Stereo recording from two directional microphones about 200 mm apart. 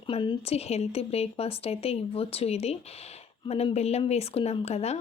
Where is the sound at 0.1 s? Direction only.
25° left (ahead or behind).